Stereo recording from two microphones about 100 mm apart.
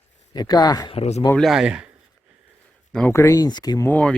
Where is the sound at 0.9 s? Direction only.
90° left.